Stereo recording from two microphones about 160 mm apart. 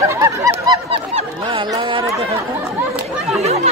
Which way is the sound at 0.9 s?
35° right (ahead or behind).